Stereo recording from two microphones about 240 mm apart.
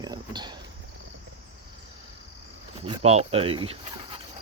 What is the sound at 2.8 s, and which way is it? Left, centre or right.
Speech, right.